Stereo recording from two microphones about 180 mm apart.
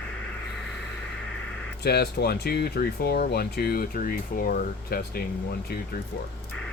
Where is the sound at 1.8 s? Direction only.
65° left (ahead or behind).